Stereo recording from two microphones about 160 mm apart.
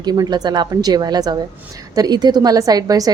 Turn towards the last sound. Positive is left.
turn(degrees=-20)  # may be behind; listen again after turning